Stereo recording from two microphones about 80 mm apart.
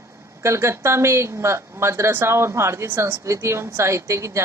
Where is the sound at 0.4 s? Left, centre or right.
Right.